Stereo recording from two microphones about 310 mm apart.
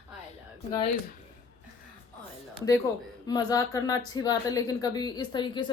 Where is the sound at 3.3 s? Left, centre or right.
Centre.